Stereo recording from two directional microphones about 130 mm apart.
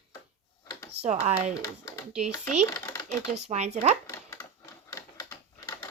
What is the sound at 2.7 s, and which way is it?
Typing, 30° left (ahead or behind).